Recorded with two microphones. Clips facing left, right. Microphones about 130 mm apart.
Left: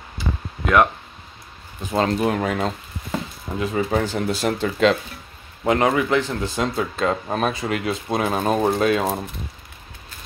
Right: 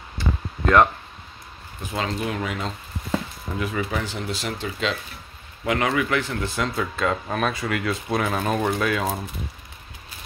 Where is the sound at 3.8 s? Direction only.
40° left (ahead or behind).